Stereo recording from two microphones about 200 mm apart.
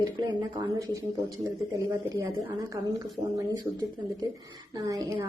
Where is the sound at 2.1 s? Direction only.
15° right (ahead or behind).